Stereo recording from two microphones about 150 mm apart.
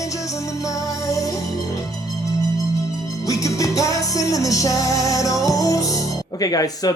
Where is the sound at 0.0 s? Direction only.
20° left (ahead or behind).